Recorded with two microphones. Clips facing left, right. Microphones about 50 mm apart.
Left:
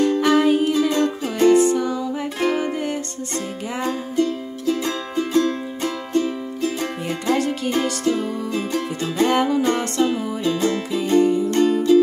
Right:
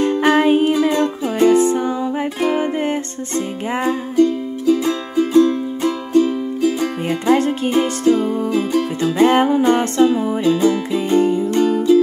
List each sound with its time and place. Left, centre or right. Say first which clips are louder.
0.0 s music: right 2 dB; right
3.8 s music: right 6 dB; centre
9.0 s music: right 5 dB; right
10.4 s music: right 5 dB; centre
11.0 s music: left 1 dB; right
11.5 s music: right 2 dB; centre